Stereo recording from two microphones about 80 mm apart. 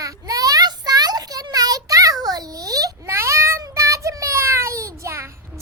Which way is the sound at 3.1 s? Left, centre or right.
Right.